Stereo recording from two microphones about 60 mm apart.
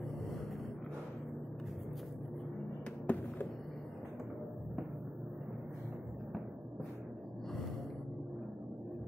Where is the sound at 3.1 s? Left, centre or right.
Left.